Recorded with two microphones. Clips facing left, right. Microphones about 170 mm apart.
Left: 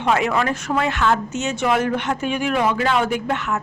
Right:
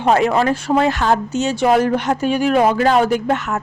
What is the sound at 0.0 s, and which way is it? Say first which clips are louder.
A woman's voice: right 5 dB; 35° right (ahead or behind).